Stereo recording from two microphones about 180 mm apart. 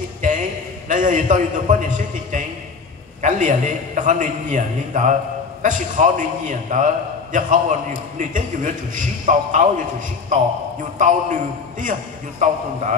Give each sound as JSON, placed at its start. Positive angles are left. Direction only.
{"t": 0.2, "sound": "a man's voice", "side_deg": -45}